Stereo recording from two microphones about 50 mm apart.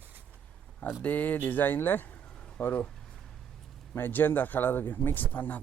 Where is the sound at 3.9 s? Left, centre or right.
Left.